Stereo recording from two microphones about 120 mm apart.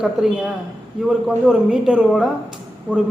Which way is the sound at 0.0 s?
5° right (ahead or behind).